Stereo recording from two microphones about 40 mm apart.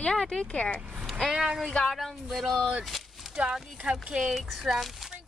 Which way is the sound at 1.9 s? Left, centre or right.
Centre.